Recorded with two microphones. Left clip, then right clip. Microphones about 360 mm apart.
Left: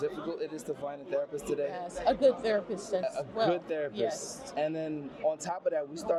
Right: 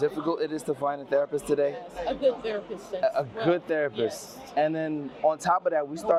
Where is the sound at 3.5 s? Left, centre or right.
Right.